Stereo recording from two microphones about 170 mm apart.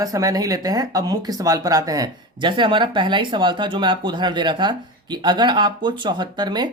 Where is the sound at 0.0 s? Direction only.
20° right (ahead or behind).